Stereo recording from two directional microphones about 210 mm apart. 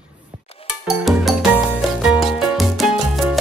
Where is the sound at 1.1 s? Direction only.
Centre (ahead or behind).